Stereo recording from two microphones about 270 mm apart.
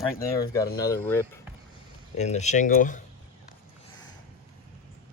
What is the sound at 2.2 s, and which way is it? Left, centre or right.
Speech, left.